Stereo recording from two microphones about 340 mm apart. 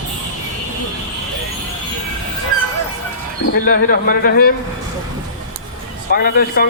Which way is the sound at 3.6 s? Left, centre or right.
Left.